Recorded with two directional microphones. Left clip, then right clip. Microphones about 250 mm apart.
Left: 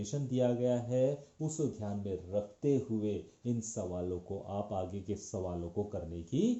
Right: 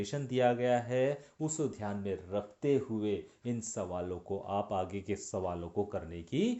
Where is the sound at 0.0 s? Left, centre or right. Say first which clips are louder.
Right 3 dB; right.